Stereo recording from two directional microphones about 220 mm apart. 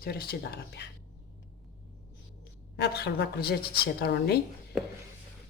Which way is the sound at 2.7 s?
45° left (ahead or behind).